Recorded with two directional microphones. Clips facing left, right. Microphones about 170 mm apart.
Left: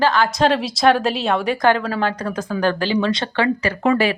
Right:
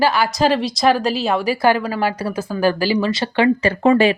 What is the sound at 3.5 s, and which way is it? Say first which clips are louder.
Speech: right 4 dB; 30° right (ahead or behind).